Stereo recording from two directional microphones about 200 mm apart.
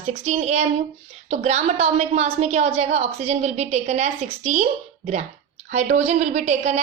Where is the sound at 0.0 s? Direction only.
35° right (ahead or behind).